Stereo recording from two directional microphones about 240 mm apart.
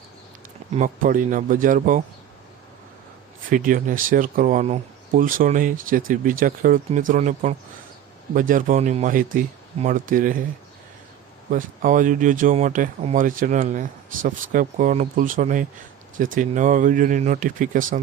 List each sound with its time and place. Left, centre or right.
0.8 s speech: right
3.5 s speech: right
11.5 s speech: right